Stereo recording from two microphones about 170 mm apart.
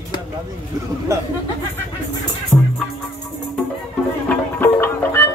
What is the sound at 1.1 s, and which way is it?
Speech, 15° right (ahead or behind).